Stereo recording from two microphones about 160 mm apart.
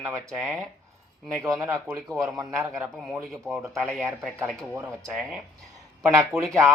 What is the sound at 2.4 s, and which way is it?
Speech, 20° right (ahead or behind).